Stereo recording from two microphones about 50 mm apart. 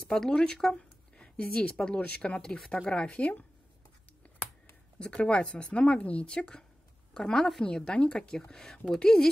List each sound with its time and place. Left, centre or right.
0.1 s a woman's voice: centre
4.9 s a woman's voice: left